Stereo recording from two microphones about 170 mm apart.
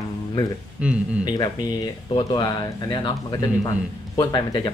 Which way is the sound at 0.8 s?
5° right (ahead or behind).